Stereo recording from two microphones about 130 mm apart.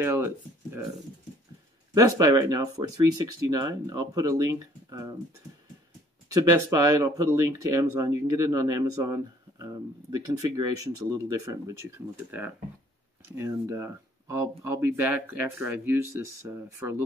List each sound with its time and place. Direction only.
0.0 s speech: 20° right (ahead or behind)
2.0 s speech: 25° right (ahead or behind)
6.2 s speech: 25° right (ahead or behind)